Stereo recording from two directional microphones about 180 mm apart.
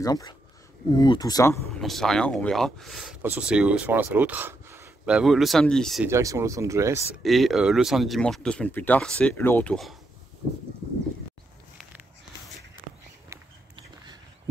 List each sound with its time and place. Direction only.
0.0 s speech: 20° left (ahead or behind)
1.8 s speech: centre (ahead or behind)
6.0 s speech: 15° right (ahead or behind)
7.2 s speech: centre (ahead or behind)